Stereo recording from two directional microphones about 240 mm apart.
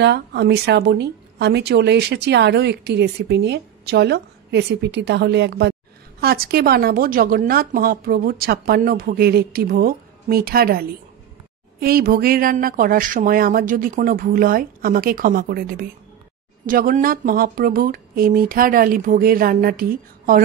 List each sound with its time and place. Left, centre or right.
0.0 s a woman's voice: right